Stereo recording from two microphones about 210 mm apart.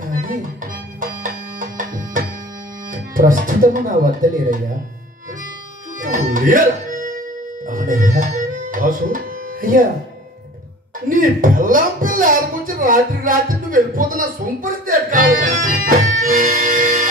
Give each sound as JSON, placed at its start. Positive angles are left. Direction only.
{"t": 0.1, "sound": "music", "side_deg": -40}
{"t": 2.9, "sound": "speech", "side_deg": -40}
{"t": 5.9, "sound": "music", "side_deg": -40}
{"t": 11.1, "sound": "speech", "side_deg": -40}
{"t": 16.2, "sound": "music", "side_deg": -40}